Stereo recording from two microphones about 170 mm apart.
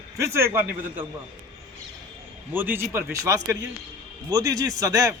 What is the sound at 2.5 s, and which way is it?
A man's voice, 10° right (ahead or behind).